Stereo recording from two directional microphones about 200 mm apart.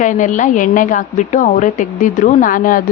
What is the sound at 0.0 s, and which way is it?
A woman's voice, 40° left (ahead or behind).